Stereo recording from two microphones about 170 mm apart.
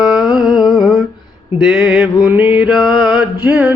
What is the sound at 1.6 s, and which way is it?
Music, 5° right (ahead or behind).